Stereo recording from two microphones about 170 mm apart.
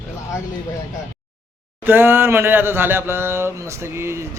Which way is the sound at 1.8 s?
10° right (ahead or behind).